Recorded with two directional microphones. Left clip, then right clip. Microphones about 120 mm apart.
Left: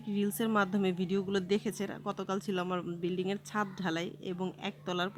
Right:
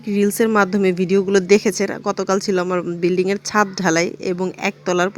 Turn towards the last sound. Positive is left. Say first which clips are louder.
# right 16 dB
turn(degrees=-30)  # may be behind; listen again after turning